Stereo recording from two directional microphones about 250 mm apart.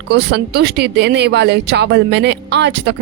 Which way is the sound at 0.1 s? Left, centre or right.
Right.